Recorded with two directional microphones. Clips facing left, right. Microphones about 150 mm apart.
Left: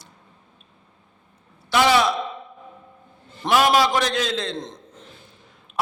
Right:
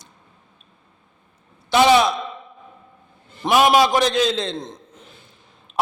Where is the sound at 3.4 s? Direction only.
15° right (ahead or behind).